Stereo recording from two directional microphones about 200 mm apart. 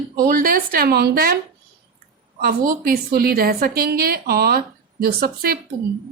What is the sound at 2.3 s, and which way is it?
A woman's voice, 45° right (ahead or behind).